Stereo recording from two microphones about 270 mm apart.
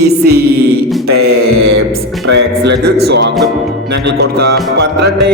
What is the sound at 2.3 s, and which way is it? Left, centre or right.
Mantra, right.